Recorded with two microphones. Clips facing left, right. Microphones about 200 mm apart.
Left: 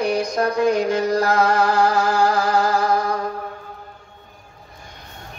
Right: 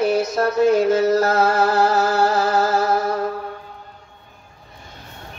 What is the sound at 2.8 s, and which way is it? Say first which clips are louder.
Music: even; 5° right (ahead or behind).